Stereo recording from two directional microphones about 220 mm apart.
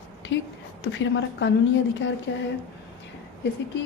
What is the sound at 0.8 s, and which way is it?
A woman's voice, 55° left (ahead or behind).